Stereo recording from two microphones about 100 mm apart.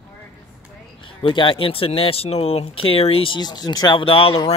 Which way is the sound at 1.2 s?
60° left (ahead or behind).